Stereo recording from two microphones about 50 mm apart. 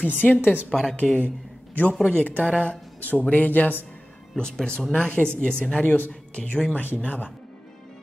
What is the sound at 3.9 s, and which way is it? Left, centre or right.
Music, left.